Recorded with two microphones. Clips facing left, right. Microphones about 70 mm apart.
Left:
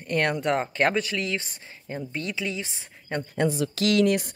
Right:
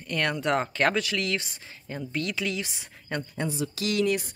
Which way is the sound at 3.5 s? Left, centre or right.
Left.